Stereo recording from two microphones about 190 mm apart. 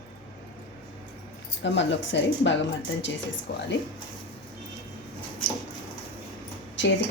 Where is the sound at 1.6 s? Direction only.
70° left (ahead or behind).